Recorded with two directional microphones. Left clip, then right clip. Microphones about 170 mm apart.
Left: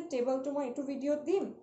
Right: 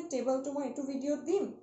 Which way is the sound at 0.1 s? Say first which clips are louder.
Left 1 dB; 15° left (ahead or behind).